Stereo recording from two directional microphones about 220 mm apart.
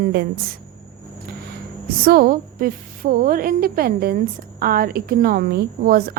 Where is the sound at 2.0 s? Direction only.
40° right (ahead or behind).